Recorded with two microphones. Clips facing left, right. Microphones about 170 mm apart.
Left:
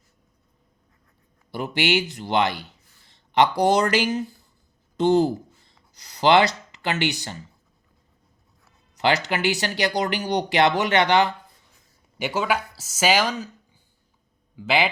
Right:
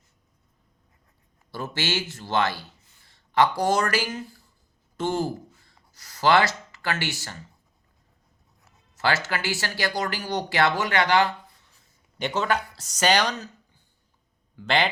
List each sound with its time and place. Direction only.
1.5 s speech: 15° left (ahead or behind)
9.0 s speech: 20° left (ahead or behind)
12.2 s speech: 5° left (ahead or behind)
14.5 s a man's voice: 10° left (ahead or behind)